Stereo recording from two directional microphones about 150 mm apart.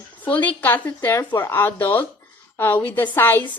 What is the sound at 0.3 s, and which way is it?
Speech, 10° left (ahead or behind).